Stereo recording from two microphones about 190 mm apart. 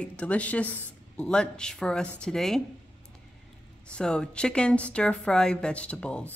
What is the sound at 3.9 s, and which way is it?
A woman's voice, 5° left (ahead or behind).